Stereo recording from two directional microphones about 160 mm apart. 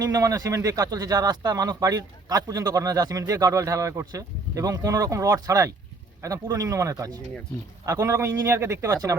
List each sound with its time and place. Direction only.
0.0 s a man's voice: 20° right (ahead or behind)